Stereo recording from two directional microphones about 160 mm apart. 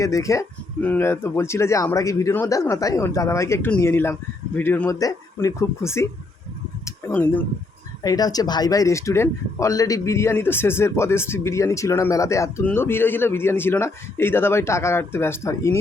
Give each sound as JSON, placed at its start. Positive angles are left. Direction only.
{"t": 0.0, "sound": "a man's voice", "side_deg": 20}
{"t": 6.8, "sound": "a sound", "side_deg": 10}
{"t": 8.0, "sound": "a man's voice", "side_deg": 25}